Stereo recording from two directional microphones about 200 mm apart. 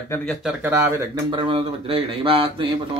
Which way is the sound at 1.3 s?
25° right (ahead or behind).